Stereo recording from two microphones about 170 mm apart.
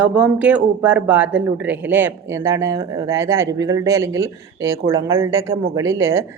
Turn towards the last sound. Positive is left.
turn(degrees=-15)  # may be behind; listen again after turning